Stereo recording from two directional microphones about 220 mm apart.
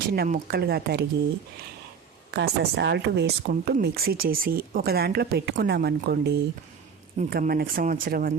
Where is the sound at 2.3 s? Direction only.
50° right (ahead or behind).